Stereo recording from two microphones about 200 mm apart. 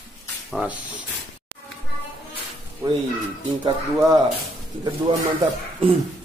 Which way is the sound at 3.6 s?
20° right (ahead or behind).